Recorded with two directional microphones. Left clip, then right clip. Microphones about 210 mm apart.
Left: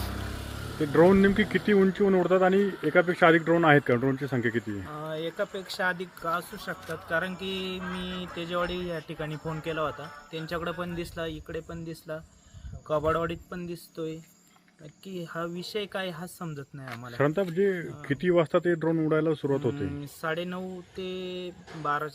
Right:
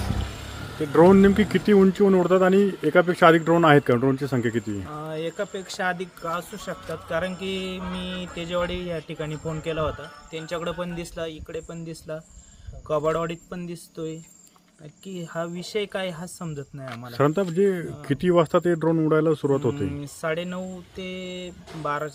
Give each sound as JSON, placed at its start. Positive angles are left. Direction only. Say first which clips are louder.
{"t": 0.0, "sound": "a sound", "louder": "right 3 dB", "side_deg": 45}
{"t": 0.8, "sound": "speech", "louder": "right 5 dB", "side_deg": -10}
{"t": 7.8, "sound": "mantra", "louder": "right 3 dB", "side_deg": 15}
{"t": 8.4, "sound": "speech", "louder": "right 3 dB", "side_deg": -10}
{"t": 9.3, "sound": "mantra", "louder": "right 4 dB", "side_deg": 20}
{"t": 9.6, "sound": "speech", "louder": "right 4 dB", "side_deg": -5}